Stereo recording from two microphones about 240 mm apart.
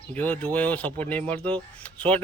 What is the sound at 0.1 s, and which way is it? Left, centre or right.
A man's voice, centre.